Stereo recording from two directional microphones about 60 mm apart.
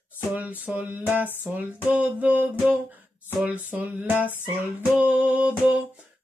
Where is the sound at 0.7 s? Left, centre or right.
Right.